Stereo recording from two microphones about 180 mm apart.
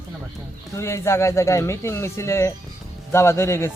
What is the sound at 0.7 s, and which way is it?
Speech, 15° left (ahead or behind).